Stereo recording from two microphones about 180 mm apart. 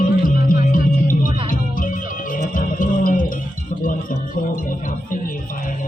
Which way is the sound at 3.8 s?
50° left (ahead or behind).